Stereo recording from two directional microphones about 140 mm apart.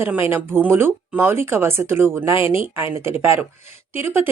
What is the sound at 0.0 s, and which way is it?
A woman's voice, 15° right (ahead or behind).